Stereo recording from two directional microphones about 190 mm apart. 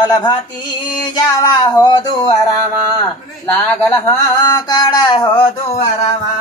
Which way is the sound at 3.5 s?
15° left (ahead or behind).